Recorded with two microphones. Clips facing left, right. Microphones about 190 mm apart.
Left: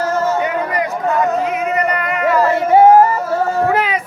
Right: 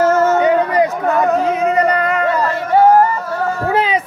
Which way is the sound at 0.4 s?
30° right (ahead or behind).